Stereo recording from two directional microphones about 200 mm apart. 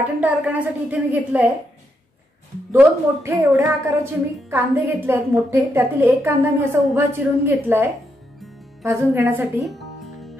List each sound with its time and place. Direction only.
0.2 s a woman's voice: 10° right (ahead or behind)
3.3 s a woman's voice: 10° right (ahead or behind)
9.7 s music: centre (ahead or behind)